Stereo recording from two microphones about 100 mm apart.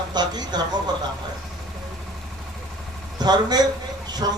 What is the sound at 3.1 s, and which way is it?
A man's voice, 45° right (ahead or behind).